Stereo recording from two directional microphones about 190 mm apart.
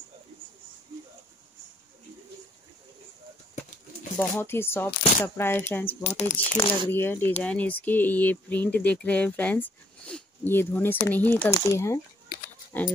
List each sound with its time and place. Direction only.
4.2 s speech: 10° left (ahead or behind)
6.0 s speech: 35° left (ahead or behind)
6.3 s speech: 10° left (ahead or behind)